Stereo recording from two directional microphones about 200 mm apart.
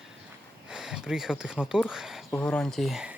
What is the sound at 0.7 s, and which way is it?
A woman's voice, 5° right (ahead or behind).